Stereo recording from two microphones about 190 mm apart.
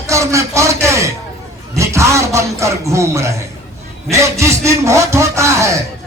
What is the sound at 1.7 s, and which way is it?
A man's voice, 15° right (ahead or behind).